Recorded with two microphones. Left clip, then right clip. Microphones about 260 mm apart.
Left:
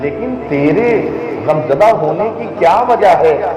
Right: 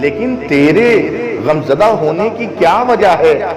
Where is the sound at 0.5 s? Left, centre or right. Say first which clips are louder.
Right 3 dB; right.